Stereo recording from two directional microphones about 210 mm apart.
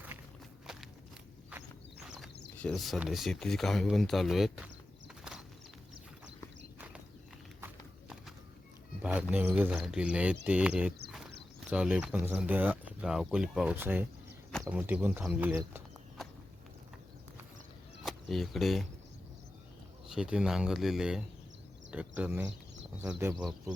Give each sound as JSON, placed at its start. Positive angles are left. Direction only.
{"t": 1.5, "sound": "speech", "side_deg": -5}
{"t": 9.0, "sound": "a sound", "side_deg": -5}
{"t": 9.3, "sound": "speech", "side_deg": -10}
{"t": 18.0, "sound": "speech", "side_deg": 0}
{"t": 20.1, "sound": "speech", "side_deg": -5}